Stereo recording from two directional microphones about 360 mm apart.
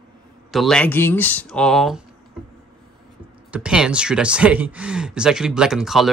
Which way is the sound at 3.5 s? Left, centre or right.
Centre.